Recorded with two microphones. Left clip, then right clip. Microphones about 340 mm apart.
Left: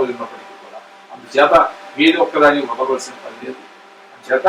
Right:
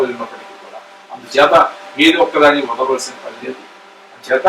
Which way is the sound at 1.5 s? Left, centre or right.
Centre.